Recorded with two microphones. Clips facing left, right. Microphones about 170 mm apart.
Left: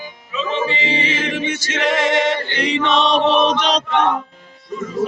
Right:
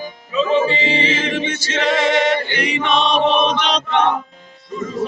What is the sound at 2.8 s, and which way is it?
Chant, 35° left (ahead or behind).